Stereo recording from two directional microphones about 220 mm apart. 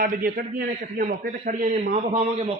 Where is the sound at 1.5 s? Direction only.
35° right (ahead or behind).